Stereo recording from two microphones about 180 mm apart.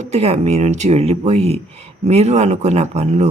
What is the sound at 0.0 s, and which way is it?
Speech, 35° right (ahead or behind).